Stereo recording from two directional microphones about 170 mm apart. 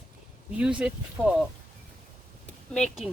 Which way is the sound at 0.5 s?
5° right (ahead or behind).